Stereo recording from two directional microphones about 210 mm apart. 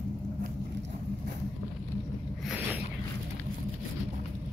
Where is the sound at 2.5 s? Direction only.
10° right (ahead or behind).